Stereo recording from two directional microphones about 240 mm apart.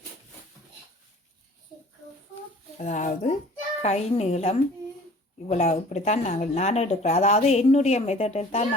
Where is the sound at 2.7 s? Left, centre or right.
Left.